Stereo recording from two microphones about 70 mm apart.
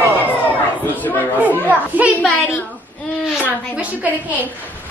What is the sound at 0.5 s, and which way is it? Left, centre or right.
Chatter, left.